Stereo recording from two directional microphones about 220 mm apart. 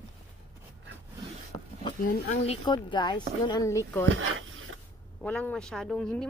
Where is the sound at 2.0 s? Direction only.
35° left (ahead or behind).